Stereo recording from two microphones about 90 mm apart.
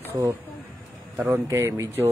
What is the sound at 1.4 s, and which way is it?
Speech, 35° right (ahead or behind).